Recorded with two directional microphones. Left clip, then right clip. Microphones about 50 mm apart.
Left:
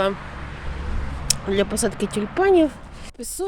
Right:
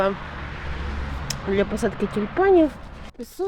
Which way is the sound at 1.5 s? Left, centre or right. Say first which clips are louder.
Even; left.